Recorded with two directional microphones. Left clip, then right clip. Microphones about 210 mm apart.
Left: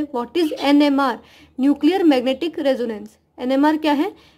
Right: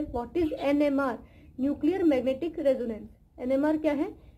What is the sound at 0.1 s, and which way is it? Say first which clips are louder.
A woman's voice: left 8 dB; 55° left (ahead or behind).